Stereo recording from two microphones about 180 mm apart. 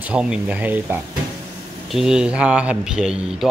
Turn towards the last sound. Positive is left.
turn(degrees=-5)  # may be behind; listen again after turning